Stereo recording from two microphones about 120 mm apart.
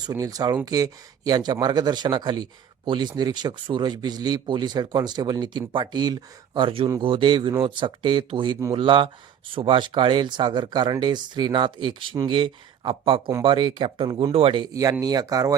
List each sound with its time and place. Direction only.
0.0 s speech: 30° right (ahead or behind)
14.7 s speech: 30° right (ahead or behind)